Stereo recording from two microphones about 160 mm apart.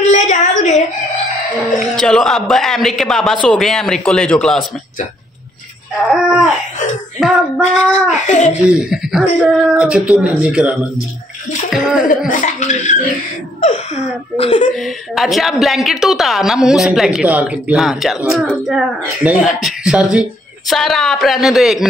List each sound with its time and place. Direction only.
0.0 s a sound: 45° left (ahead or behind)
2.0 s speech: 5° left (ahead or behind)
6.0 s speech: centre (ahead or behind)
8.6 s speech: 5° right (ahead or behind)
12.3 s speech: 50° left (ahead or behind)
14.7 s speech: centre (ahead or behind)